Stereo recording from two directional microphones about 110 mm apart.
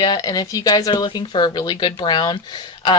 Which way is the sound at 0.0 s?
40° left (ahead or behind).